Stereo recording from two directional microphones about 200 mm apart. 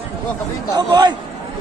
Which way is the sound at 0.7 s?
20° right (ahead or behind).